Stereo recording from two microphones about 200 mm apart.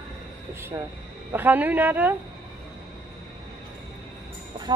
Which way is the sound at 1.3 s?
10° right (ahead or behind).